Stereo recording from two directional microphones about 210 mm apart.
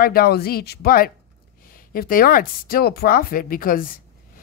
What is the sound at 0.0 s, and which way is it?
Speech, 45° left (ahead or behind).